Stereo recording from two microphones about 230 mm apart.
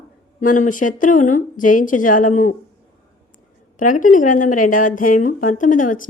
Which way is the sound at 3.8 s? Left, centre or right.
Left.